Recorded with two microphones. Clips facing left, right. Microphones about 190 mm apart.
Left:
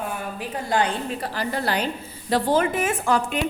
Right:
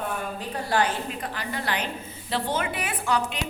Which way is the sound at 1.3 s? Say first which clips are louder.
Left 6 dB; 35° left (ahead or behind).